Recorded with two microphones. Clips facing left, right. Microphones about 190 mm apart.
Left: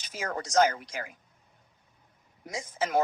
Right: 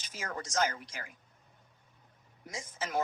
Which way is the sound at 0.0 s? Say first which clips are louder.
Left 6 dB; 75° left (ahead or behind).